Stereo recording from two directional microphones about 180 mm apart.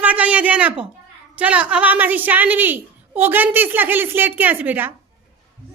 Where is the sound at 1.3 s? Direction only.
10° right (ahead or behind).